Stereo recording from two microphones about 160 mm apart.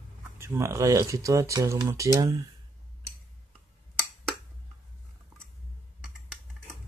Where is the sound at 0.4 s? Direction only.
15° right (ahead or behind).